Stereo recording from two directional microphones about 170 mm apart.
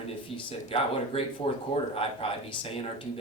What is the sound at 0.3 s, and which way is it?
Speech, 30° left (ahead or behind).